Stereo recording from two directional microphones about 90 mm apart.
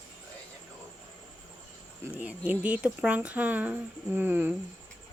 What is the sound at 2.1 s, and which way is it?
Speech, 15° right (ahead or behind).